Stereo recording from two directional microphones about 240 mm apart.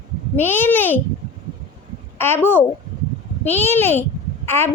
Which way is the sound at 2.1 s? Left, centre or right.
Centre.